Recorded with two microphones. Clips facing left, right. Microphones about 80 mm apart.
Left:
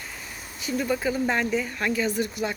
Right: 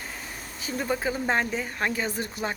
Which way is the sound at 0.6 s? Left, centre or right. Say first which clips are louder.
Left 2 dB; right.